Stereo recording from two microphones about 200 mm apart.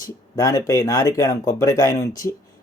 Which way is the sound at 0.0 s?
15° left (ahead or behind).